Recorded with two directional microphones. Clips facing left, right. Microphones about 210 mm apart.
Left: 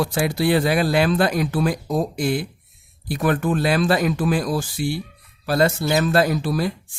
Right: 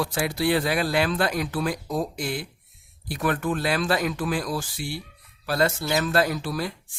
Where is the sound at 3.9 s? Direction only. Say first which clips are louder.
Left 5 dB; 35° left (ahead or behind).